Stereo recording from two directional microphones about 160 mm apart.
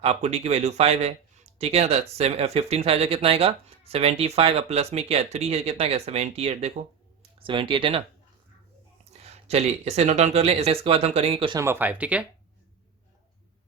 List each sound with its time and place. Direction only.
0.0 s speech: 45° right (ahead or behind)
9.5 s speech: 40° right (ahead or behind)
11.6 s speech: 15° right (ahead or behind)